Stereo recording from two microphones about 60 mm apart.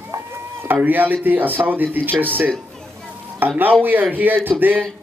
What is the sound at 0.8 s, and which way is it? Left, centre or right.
Speech, right.